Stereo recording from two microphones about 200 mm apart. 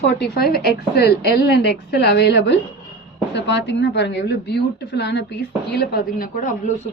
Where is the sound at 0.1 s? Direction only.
50° left (ahead or behind).